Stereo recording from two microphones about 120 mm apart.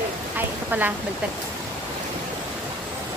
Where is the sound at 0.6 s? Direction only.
15° right (ahead or behind).